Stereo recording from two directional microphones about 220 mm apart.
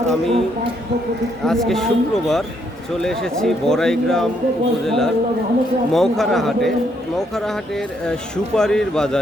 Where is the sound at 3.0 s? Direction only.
Centre (ahead or behind).